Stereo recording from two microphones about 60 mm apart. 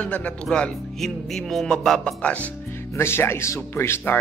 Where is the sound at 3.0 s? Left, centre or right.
Left.